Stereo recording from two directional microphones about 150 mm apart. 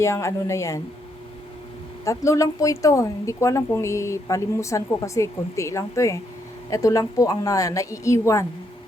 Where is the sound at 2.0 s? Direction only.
20° left (ahead or behind).